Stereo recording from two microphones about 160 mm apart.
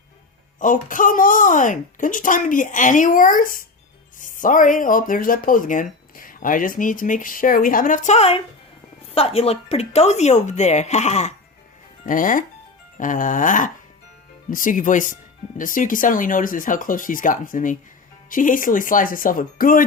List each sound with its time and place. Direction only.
0.6 s speech: 55° left (ahead or behind)
12.0 s speech: 55° left (ahead or behind)